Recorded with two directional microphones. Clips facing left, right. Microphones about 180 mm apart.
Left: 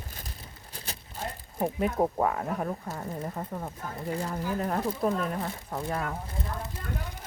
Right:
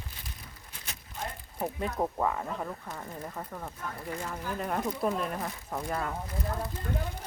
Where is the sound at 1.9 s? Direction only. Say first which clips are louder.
Left 4 dB; 25° left (ahead or behind).